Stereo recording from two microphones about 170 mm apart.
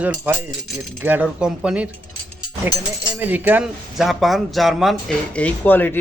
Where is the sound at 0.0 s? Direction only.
10° right (ahead or behind).